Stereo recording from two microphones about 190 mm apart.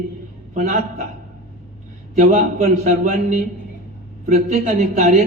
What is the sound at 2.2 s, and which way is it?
A man's voice, 40° right (ahead or behind).